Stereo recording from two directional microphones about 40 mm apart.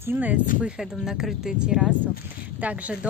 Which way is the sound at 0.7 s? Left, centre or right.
Centre.